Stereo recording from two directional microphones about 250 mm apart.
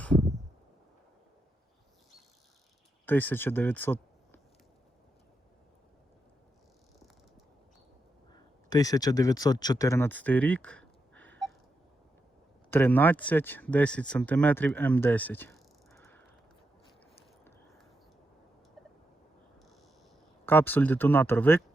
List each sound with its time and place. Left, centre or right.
3.1 s speech: centre
8.3 s speech: centre
12.7 s speech: centre
20.4 s speech: centre